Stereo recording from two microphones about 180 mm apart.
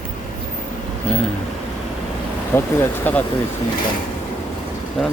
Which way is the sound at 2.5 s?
15° left (ahead or behind).